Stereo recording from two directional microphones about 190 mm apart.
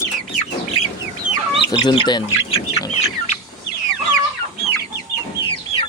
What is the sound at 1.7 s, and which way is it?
Chicken, 20° left (ahead or behind).